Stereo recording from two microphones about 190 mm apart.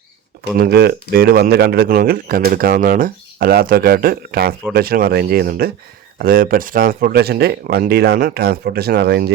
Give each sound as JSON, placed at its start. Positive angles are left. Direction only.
{"t": 0.6, "sound": "speech", "side_deg": -55}